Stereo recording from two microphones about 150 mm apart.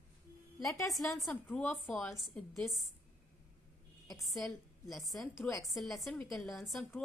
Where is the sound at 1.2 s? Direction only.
5° left (ahead or behind).